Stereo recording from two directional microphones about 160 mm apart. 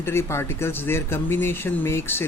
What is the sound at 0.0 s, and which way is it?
Speech, 15° left (ahead or behind).